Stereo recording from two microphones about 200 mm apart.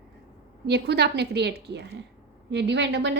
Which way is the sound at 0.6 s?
55° right (ahead or behind).